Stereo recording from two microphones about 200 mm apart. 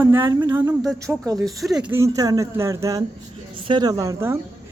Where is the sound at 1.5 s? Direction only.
Centre (ahead or behind).